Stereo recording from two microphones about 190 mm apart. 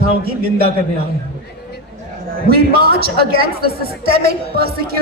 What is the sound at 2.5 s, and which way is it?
A man's voice, 55° right (ahead or behind).